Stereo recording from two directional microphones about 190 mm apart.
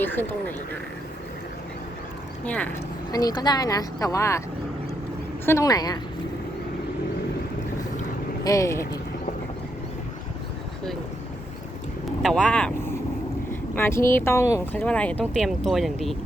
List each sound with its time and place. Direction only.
0.0 s speech: 10° left (ahead or behind)
2.4 s speech: 5° left (ahead or behind)
3.1 s speech: 20° left (ahead or behind)
5.5 s speech: 15° left (ahead or behind)
8.4 s speech: 15° left (ahead or behind)
12.2 s speech: 5° left (ahead or behind)